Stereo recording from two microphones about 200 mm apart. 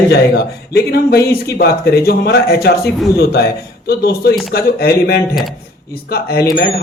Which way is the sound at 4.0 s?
55° left (ahead or behind).